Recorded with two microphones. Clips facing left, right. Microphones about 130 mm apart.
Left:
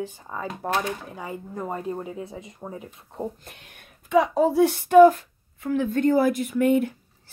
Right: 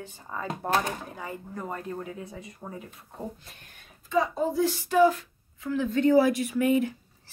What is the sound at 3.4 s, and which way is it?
Speech, 70° left (ahead or behind).